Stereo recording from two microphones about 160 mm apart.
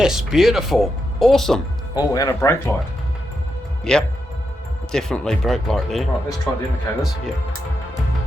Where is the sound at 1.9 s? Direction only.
20° left (ahead or behind).